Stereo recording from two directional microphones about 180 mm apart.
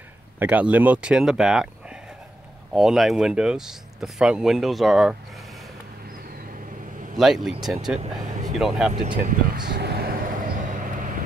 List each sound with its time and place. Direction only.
0.4 s speech: 10° right (ahead or behind)
2.7 s speech: 5° right (ahead or behind)
7.2 s speech: centre (ahead or behind)
8.9 s speech: 45° right (ahead or behind)
9.7 s vehicle: 60° right (ahead or behind)